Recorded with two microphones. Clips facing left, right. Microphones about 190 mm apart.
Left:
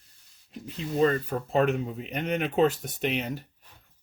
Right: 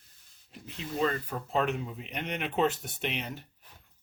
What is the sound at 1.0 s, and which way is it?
Speech, 45° left (ahead or behind).